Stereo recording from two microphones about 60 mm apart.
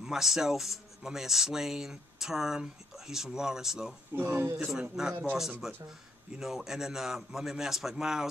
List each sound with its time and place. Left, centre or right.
0.0 s speech: centre
4.1 s speech: right
5.0 s speech: centre